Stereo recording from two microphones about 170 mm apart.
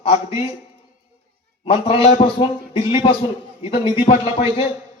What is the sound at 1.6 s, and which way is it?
A man's voice, 35° left (ahead or behind).